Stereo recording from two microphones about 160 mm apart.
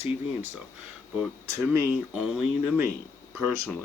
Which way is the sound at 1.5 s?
15° right (ahead or behind).